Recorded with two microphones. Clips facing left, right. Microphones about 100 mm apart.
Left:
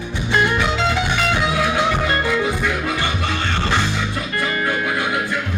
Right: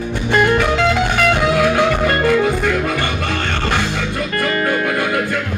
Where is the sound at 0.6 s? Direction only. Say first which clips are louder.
Right 4 dB; 50° right (ahead or behind).